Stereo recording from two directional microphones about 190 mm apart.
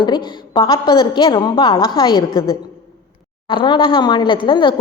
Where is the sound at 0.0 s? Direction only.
25° left (ahead or behind).